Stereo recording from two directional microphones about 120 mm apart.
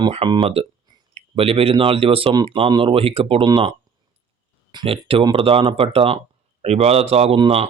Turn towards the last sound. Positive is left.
turn(degrees=-55)  # may be behind; listen again after turning